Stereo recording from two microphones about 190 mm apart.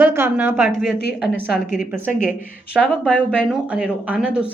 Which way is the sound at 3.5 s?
5° right (ahead or behind).